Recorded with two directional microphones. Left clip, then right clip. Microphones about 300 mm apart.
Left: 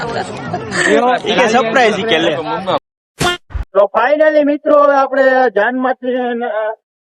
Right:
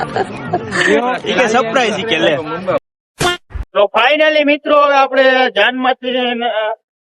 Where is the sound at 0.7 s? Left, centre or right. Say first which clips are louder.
Left 2 dB; centre.